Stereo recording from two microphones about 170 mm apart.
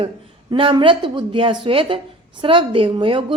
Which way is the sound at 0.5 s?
30° right (ahead or behind).